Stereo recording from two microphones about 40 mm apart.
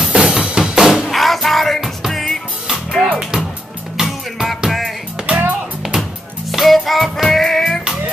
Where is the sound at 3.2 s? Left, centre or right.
Centre.